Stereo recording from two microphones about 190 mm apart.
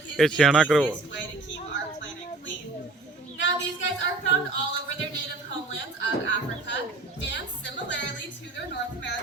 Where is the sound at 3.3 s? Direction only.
75° left (ahead or behind).